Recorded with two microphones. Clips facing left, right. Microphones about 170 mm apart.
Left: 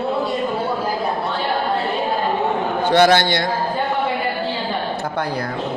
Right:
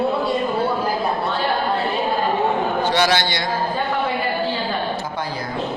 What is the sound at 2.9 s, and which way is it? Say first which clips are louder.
Speech: left 5 dB; 50° left (ahead or behind).